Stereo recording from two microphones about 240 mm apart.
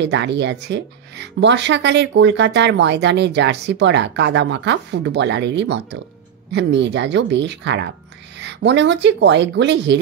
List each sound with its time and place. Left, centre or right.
0.0 s speech: right